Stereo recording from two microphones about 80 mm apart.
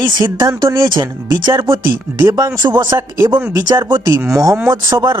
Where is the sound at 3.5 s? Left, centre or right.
Right.